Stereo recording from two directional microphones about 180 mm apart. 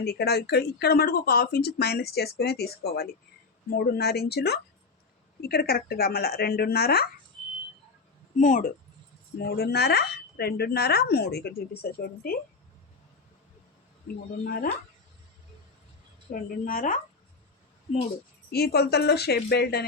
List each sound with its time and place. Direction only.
0.0 s speech: 60° left (ahead or behind)
8.4 s a woman's voice: 45° left (ahead or behind)
9.4 s speech: 60° left (ahead or behind)
14.4 s a woman's voice: 55° left (ahead or behind)
16.3 s a woman's voice: 50° left (ahead or behind)
18.5 s speech: 60° left (ahead or behind)